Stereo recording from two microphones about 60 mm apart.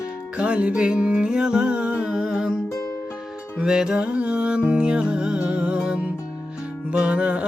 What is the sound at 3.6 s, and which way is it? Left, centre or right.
Music, centre.